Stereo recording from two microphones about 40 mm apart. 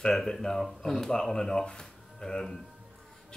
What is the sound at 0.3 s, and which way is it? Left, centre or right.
Speech, centre.